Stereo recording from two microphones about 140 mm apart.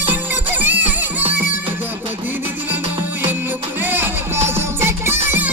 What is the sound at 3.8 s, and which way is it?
Music, 15° right (ahead or behind).